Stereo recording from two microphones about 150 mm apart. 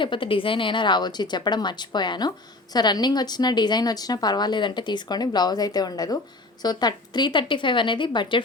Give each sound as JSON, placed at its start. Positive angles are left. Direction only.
{"t": 0.0, "sound": "a woman's voice", "side_deg": 35}